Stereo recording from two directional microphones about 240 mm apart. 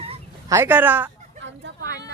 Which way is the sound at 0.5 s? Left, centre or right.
Centre.